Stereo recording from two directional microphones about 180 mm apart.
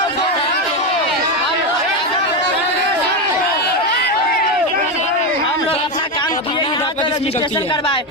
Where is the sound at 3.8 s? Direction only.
65° left (ahead or behind).